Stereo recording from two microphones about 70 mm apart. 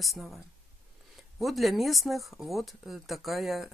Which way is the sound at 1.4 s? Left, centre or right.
Centre.